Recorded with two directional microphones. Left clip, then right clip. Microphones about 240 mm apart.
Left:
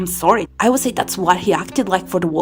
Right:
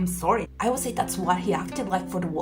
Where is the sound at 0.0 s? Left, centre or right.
Left.